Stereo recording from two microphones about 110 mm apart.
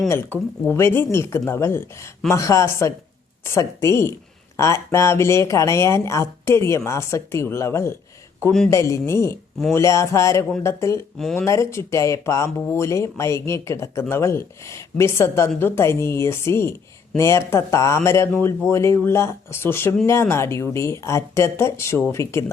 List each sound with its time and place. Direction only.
0.1 s speech: 20° left (ahead or behind)